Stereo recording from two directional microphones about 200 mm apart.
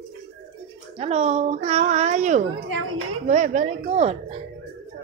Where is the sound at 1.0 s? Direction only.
30° right (ahead or behind).